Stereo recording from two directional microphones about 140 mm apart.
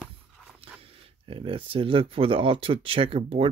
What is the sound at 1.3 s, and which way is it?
Speech, 40° right (ahead or behind).